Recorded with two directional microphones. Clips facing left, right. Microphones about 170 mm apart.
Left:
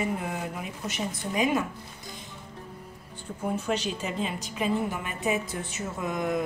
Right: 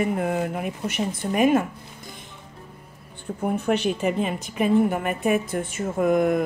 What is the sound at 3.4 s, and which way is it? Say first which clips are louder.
A woman's voice: right 6 dB; 55° right (ahead or behind).